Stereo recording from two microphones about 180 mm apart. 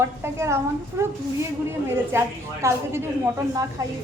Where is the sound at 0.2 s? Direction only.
15° right (ahead or behind).